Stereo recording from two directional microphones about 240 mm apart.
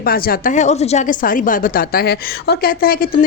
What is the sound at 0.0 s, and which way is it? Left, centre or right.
A woman's voice, left.